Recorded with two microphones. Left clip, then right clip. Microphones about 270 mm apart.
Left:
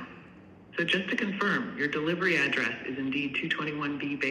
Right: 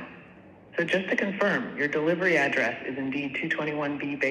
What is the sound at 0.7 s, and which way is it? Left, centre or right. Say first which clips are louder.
A man's voice: right 3 dB; centre.